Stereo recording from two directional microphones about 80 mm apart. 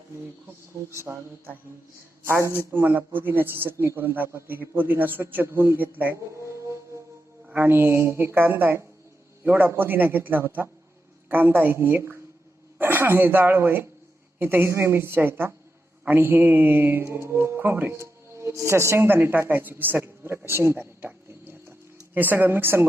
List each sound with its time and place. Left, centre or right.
0.9 s a man's voice: right
7.4 s a man's voice: right
21.2 s a sound: right
22.1 s speech: right